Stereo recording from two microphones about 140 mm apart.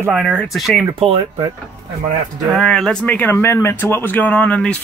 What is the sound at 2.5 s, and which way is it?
Speech, 5° left (ahead or behind).